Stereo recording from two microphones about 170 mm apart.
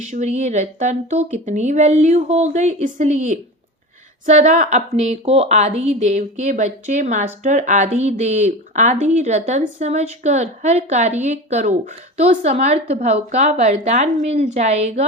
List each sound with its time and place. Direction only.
0.0 s speech: 45° right (ahead or behind)